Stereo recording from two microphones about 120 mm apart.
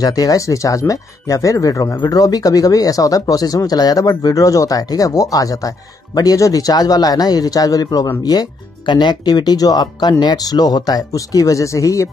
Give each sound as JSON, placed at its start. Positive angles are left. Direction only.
{"t": 0.0, "sound": "speech", "side_deg": 30}